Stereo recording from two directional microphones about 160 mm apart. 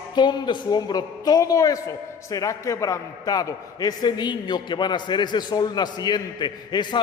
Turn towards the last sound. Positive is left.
turn(degrees=30)  # may be behind; listen again after turning